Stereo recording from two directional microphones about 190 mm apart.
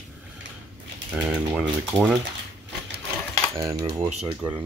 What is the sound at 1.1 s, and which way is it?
Speech, 5° right (ahead or behind).